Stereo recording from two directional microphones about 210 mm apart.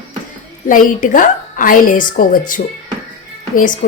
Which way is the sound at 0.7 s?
40° left (ahead or behind).